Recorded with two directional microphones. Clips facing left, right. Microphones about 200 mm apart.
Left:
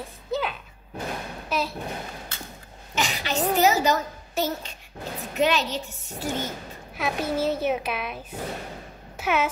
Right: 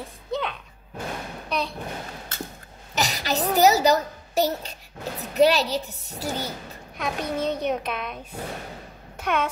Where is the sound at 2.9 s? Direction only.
40° right (ahead or behind).